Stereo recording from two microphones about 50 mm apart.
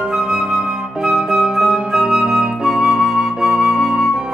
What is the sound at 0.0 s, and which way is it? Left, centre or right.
Flute, centre.